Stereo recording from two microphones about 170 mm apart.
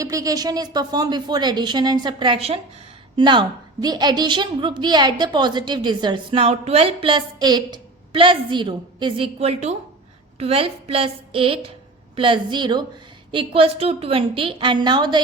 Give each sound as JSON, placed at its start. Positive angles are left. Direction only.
{"t": 0.0, "sound": "a woman's voice", "side_deg": -20}